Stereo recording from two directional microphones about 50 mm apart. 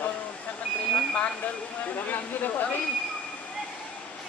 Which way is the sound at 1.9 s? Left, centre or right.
Left.